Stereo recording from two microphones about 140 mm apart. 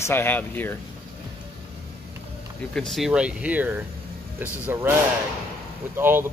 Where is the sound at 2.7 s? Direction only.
5° left (ahead or behind); by 4.9 s 15° right (ahead or behind).